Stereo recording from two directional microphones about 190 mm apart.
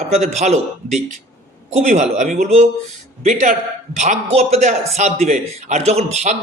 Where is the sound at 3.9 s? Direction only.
35° right (ahead or behind).